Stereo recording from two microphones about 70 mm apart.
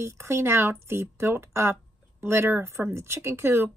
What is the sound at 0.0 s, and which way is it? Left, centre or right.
Speech, right.